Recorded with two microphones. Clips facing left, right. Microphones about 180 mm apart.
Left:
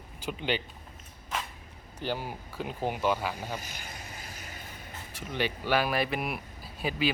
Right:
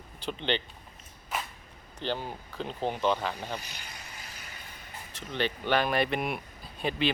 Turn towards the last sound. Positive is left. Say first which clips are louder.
# right 1 dB
turn(degrees=5)  # may be behind; listen again after turning